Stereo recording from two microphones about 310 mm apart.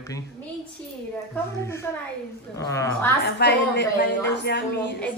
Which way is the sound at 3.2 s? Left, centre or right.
Left.